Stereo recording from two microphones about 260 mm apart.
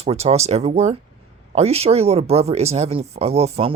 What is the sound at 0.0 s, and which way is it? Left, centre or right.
A woman's voice, right.